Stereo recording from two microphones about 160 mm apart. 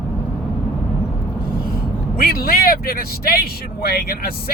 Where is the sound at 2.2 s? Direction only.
70° left (ahead or behind).